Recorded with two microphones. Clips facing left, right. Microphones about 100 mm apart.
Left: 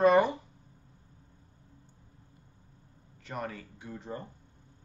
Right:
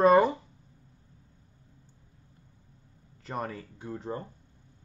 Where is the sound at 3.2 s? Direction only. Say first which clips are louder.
Right 3 dB; 35° right (ahead or behind).